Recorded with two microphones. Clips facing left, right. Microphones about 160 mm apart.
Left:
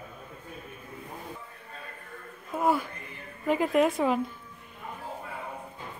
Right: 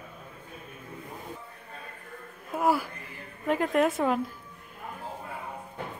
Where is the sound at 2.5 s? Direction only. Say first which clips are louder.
Even; 5° right (ahead or behind).